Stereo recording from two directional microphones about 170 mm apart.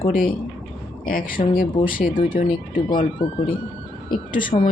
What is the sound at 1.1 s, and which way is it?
Speech, 55° left (ahead or behind).